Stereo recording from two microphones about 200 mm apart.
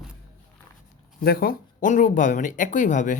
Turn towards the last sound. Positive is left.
turn(degrees=40)  # may be behind; listen again after turning